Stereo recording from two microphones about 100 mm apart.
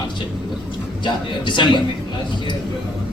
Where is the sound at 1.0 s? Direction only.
50° left (ahead or behind).